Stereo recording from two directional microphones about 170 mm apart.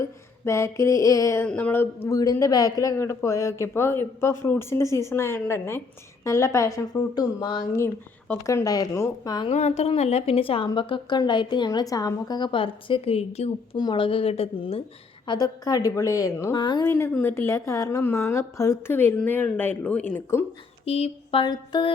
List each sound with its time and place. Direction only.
0.0 s a sound: 15° left (ahead or behind)
1.5 s a woman's voice: 10° left (ahead or behind)
9.5 s a woman's voice: 40° left (ahead or behind)
15.3 s a woman's voice: 20° left (ahead or behind)
16.9 s a woman's voice: 15° left (ahead or behind)
20.8 s a woman's voice: 35° left (ahead or behind)